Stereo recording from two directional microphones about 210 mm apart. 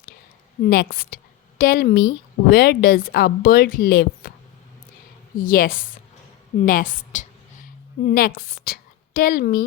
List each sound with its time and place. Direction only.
0.6 s a woman's voice: 45° left (ahead or behind)
5.4 s a woman's voice: 40° left (ahead or behind)